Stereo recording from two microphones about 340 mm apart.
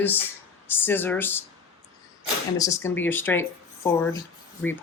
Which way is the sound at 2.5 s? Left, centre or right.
Centre.